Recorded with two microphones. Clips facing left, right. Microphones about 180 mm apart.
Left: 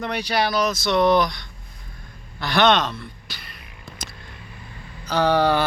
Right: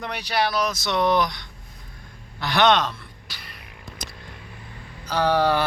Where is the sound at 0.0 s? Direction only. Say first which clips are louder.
Left 2 dB; 5° right (ahead or behind).